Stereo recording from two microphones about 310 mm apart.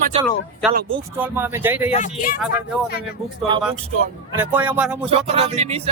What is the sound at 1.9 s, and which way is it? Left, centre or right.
Speech, left.